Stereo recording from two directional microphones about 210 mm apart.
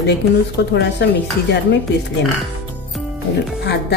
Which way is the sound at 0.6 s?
50° left (ahead or behind).